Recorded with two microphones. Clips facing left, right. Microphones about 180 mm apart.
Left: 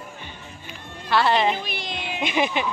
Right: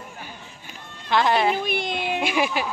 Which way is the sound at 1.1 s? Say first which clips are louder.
Even; 10° right (ahead or behind).